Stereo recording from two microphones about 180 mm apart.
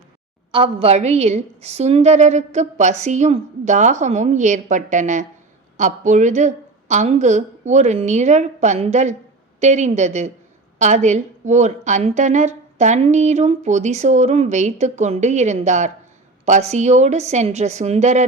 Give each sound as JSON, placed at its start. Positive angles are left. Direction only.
{"t": 0.5, "sound": "a woman's voice", "side_deg": -30}